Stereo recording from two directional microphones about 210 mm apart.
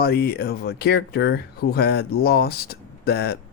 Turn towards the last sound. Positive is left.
turn(degrees=50)  # may be behind; listen again after turning